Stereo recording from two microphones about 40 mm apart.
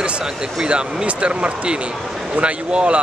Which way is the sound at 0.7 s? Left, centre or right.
Right.